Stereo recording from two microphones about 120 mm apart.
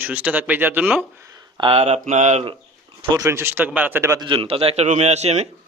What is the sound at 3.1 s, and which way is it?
A man's voice, 20° right (ahead or behind).